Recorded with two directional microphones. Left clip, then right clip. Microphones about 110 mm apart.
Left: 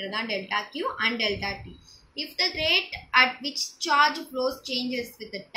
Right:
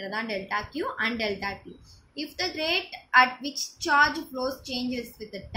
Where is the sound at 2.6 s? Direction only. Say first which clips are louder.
Left 3 dB; 20° right (ahead or behind).